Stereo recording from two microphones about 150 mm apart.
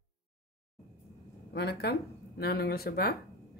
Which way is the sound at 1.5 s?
90° left.